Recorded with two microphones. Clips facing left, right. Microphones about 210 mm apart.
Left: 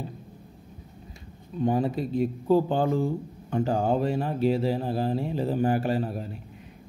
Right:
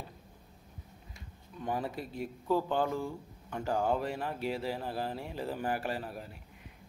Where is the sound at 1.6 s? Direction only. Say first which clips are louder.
Left 11 dB; 25° left (ahead or behind).